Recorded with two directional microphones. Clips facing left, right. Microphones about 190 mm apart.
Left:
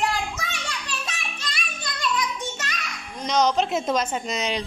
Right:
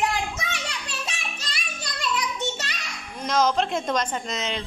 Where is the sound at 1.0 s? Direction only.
30° right (ahead or behind).